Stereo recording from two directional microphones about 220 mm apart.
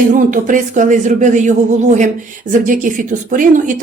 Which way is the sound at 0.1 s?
35° right (ahead or behind).